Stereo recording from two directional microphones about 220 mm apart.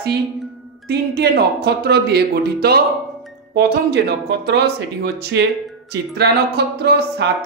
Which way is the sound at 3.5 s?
45° right (ahead or behind).